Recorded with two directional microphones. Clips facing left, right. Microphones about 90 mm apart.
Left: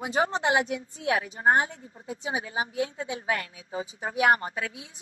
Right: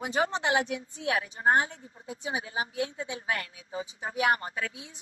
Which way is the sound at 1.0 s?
25° left (ahead or behind).